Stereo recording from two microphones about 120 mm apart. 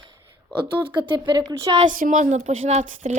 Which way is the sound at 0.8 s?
40° right (ahead or behind).